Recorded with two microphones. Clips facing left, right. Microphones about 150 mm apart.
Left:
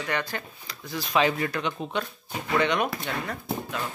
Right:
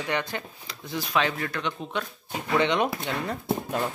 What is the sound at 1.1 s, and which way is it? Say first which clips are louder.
Speech: left 3 dB; 5° left (ahead or behind).